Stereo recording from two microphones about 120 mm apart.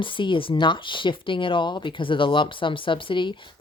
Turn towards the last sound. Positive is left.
turn(degrees=40)  # may be behind; listen again after turning